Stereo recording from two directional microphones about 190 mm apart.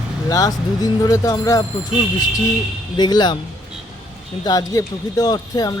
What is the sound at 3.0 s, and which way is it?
Speech, 20° left (ahead or behind).